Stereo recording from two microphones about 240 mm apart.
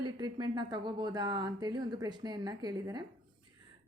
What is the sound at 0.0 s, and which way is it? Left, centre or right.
A woman's voice, centre.